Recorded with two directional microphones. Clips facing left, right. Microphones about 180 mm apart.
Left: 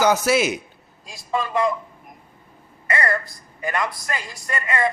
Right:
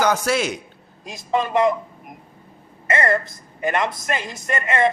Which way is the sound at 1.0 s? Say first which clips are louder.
Right 3 dB; 20° right (ahead or behind).